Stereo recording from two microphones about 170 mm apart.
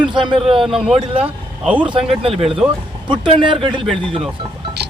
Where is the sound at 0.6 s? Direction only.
5° right (ahead or behind).